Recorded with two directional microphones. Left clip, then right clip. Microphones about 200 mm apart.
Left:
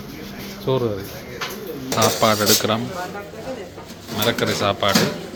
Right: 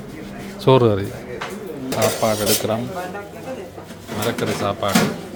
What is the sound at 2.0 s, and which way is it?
Speech, centre (ahead or behind).